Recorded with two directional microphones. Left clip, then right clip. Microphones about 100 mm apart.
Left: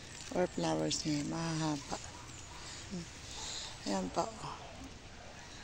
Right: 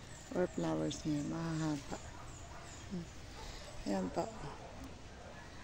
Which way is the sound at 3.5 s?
20° right (ahead or behind).